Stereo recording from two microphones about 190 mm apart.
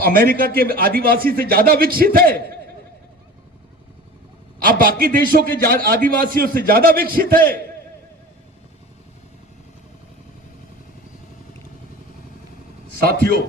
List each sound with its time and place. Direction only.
0.0 s a man's voice: 50° right (ahead or behind)
4.6 s a man's voice: 50° right (ahead or behind)
13.0 s a man's voice: 55° right (ahead or behind)